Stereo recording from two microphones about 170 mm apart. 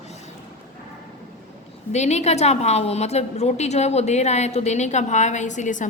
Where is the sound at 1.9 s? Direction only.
40° left (ahead or behind).